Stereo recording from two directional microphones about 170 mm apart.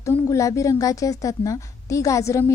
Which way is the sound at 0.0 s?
20° left (ahead or behind).